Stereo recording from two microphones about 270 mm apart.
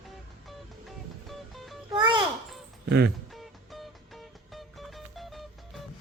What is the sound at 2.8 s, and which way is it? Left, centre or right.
Speech, right.